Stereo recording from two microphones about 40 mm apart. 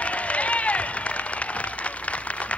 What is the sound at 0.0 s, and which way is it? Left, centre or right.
Applause, left.